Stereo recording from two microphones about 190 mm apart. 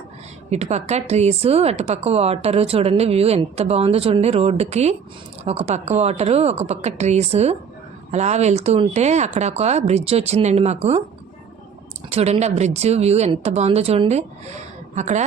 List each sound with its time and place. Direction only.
0.5 s speech: 35° right (ahead or behind)
12.1 s speech: 35° right (ahead or behind)